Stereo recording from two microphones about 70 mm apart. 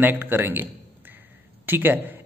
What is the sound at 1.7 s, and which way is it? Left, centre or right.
Speech, right.